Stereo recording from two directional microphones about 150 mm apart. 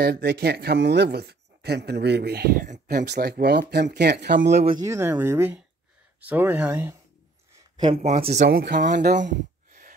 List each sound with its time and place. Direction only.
0.0 s speech: 90° right
2.6 s speech: 55° right (ahead or behind); by 4.6 s 90° right
4.8 s speech: 20° right (ahead or behind)
7.7 s a sound: 30° right (ahead or behind)
8.0 s speech: 50° right (ahead or behind)
8.5 s speech: 80° right; by 9.2 s 60° right (ahead or behind)
9.7 s a sound: 60° right (ahead or behind)